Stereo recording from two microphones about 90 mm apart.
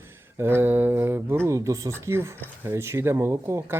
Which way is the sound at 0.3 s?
25° right (ahead or behind).